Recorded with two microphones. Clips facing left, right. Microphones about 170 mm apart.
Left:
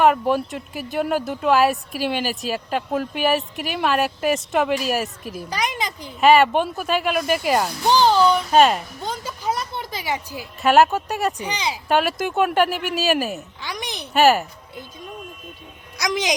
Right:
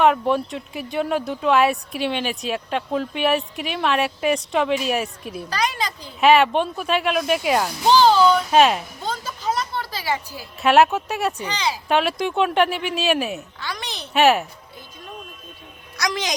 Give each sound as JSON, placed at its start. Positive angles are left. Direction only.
{"t": 0.0, "sound": "speech", "side_deg": 5}
{"t": 5.5, "sound": "speech", "side_deg": 15}
{"t": 6.1, "sound": "speech", "side_deg": 0}
{"t": 7.9, "sound": "speech", "side_deg": 15}
{"t": 8.4, "sound": "speech", "side_deg": 0}
{"t": 9.0, "sound": "a sound", "side_deg": 15}
{"t": 10.6, "sound": "speech", "side_deg": 0}
{"t": 11.3, "sound": "speech", "side_deg": 15}
{"t": 11.9, "sound": "speech", "side_deg": 0}
{"t": 13.6, "sound": "a child's voice", "side_deg": 15}
{"t": 14.1, "sound": "speech", "side_deg": 0}
{"t": 16.0, "sound": "speech", "side_deg": 15}